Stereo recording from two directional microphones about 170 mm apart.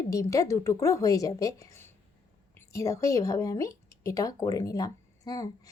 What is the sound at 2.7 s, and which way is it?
Speech, 20° left (ahead or behind).